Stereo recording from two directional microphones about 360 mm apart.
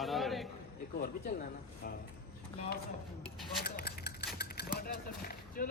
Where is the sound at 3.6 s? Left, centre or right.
Left.